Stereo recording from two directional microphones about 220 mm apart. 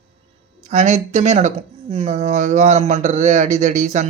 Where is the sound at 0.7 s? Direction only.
30° right (ahead or behind).